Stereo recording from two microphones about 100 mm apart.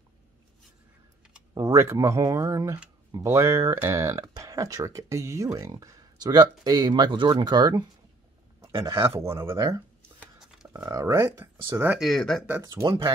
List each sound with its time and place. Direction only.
1.5 s speech: 35° right (ahead or behind)
8.5 s a sound: 30° right (ahead or behind)
9.0 s speech: 25° right (ahead or behind)
10.9 s speech: 35° right (ahead or behind)
12.0 s speech: 5° left (ahead or behind)